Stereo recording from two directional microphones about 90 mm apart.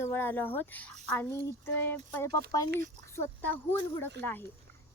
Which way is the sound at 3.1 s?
25° left (ahead or behind).